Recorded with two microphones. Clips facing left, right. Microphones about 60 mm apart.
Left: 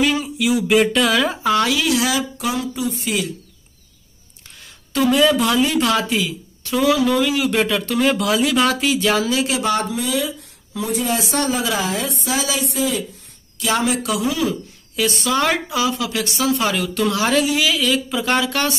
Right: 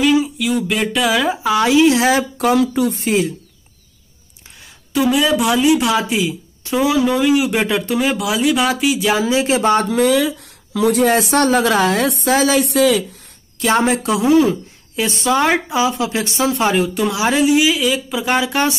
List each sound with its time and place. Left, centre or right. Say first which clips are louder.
0.0 s speech: right 4 dB; centre
1.7 s a woman's voice: right 7 dB; right
4.9 s speech: even; centre
8.0 s speech: left 3 dB; centre
9.2 s speech: right 4 dB; right
9.8 s speech: right 8 dB; right
12.3 s a woman's voice: right 8 dB; right
12.7 s speech: right 7 dB; right
13.6 s speech: right 4 dB; right; by 18.8 s centre